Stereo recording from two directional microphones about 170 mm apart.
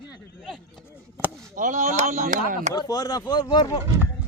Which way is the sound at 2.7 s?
20° left (ahead or behind).